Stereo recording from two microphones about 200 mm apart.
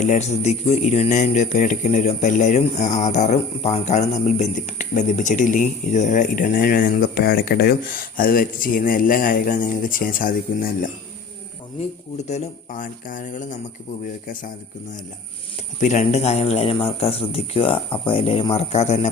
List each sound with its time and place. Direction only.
0.0 s speech: 35° left (ahead or behind)
12.3 s speech: 40° left (ahead or behind)
15.8 s speech: 35° left (ahead or behind)